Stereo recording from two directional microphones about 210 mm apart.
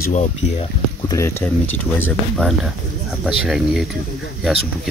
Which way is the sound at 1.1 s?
15° left (ahead or behind).